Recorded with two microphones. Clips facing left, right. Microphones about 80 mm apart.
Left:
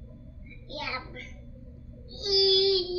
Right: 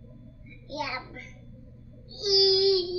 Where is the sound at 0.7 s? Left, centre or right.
Centre.